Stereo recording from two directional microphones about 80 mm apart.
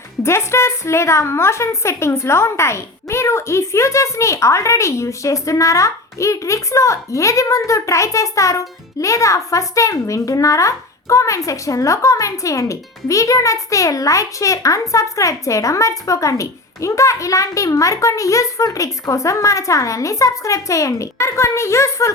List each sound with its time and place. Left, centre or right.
0.2 s speech: left